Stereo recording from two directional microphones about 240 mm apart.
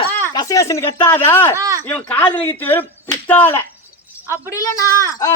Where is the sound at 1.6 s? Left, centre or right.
Centre.